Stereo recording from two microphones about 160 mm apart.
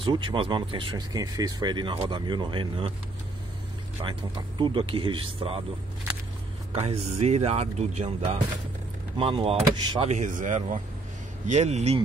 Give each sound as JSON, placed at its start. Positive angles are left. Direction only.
{"t": 0.0, "sound": "speech", "side_deg": -30}
{"t": 4.0, "sound": "speech", "side_deg": -30}
{"t": 6.7, "sound": "speech", "side_deg": -40}
{"t": 10.1, "sound": "speech", "side_deg": -50}